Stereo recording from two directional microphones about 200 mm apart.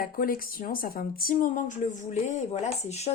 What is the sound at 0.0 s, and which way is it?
Speech, 45° left (ahead or behind).